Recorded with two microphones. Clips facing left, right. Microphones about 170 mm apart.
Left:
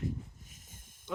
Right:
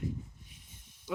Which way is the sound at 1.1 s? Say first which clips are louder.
Right 2 dB; 5° right (ahead or behind).